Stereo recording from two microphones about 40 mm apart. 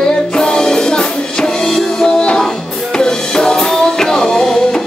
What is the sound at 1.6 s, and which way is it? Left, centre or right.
Music, centre.